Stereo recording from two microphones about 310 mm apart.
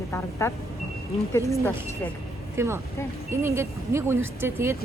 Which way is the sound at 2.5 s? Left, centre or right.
Centre.